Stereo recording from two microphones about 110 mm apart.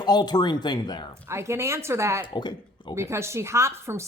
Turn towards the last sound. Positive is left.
turn(degrees=-25)  # may be behind; listen again after turning